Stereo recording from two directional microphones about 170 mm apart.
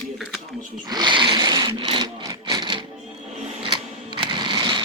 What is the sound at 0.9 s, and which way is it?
Sewing machine, 25° right (ahead or behind).